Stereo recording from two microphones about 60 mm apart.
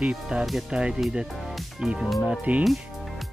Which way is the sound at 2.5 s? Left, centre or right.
Right.